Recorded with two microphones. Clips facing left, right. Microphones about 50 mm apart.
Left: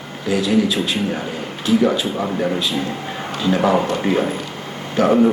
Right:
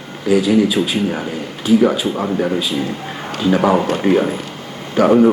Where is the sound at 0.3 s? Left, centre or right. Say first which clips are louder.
Right 4 dB; right.